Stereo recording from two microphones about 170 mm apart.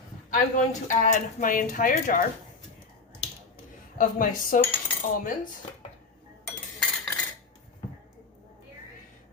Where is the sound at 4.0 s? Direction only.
50° left (ahead or behind).